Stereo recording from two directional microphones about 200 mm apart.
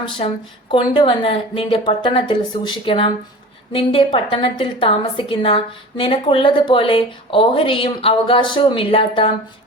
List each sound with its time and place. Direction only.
0.2 s a woman's voice: 30° left (ahead or behind)